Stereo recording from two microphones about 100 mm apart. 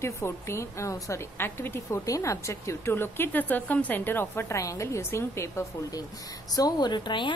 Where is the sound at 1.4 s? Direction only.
20° left (ahead or behind).